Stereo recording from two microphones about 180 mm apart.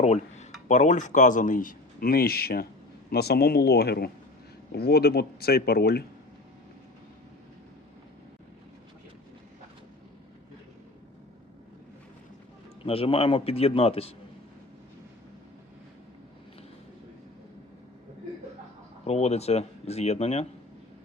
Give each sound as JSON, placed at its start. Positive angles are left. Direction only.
{"t": 0.0, "sound": "speech", "side_deg": 40}
{"t": 12.8, "sound": "speech", "side_deg": 30}
{"t": 19.0, "sound": "speech", "side_deg": 35}